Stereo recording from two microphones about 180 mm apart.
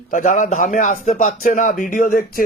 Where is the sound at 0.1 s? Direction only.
45° left (ahead or behind).